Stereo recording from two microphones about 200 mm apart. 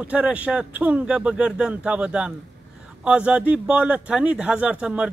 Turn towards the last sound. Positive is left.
turn(degrees=-5)  # may be behind; listen again after turning